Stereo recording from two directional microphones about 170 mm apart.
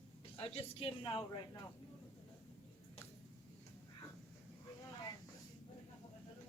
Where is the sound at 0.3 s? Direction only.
35° left (ahead or behind).